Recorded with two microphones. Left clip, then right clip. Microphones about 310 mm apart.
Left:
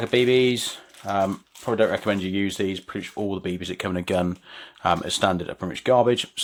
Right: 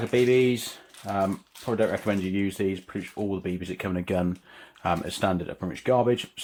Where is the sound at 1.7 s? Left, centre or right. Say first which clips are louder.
Left 4 dB; left.